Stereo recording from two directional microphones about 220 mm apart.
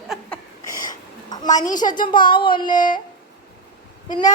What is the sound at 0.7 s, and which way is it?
A child's voice, 20° left (ahead or behind).